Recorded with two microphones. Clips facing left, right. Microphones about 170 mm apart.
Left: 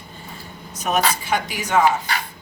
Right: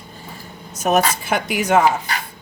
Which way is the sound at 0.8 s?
50° right (ahead or behind).